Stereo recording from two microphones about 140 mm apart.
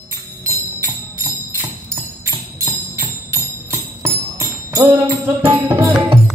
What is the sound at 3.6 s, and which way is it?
Jingle bell, 20° right (ahead or behind).